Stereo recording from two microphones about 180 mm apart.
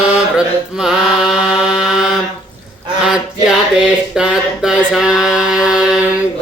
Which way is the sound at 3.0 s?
5° right (ahead or behind).